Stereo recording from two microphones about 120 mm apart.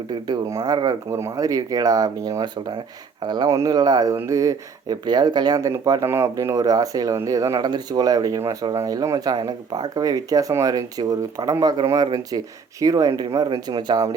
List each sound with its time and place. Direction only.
0.4 s speech: 30° right (ahead or behind)